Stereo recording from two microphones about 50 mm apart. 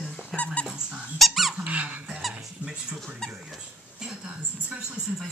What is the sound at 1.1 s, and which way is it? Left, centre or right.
Speech, centre.